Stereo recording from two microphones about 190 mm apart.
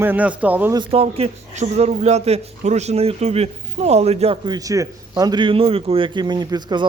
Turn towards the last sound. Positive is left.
turn(degrees=-20)  # may be behind; listen again after turning